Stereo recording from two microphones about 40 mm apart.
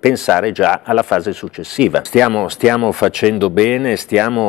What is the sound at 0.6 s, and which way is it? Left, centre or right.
Speech, centre.